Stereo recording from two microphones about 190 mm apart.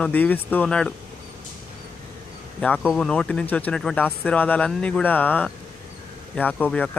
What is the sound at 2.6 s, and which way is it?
Speech, 5° left (ahead or behind).